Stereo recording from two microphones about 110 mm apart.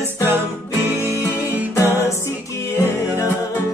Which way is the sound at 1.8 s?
20° right (ahead or behind).